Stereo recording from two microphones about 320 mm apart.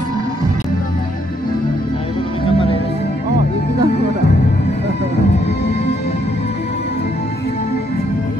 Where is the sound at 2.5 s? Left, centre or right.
Centre.